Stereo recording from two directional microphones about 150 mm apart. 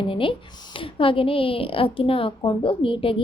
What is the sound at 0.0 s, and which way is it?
A woman's voice, 35° left (ahead or behind).